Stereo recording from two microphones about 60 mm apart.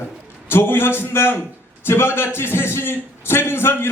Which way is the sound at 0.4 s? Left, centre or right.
Left.